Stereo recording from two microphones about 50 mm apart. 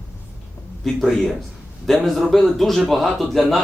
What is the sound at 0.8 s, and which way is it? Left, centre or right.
Speech, centre.